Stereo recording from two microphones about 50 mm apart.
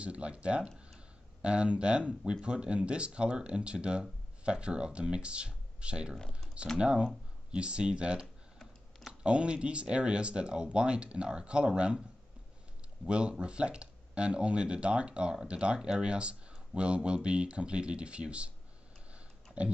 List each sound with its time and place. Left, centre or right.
0.0 s speech: right
6.1 s speech: centre
6.8 s speech: centre
13.0 s speech: right
19.6 s speech: right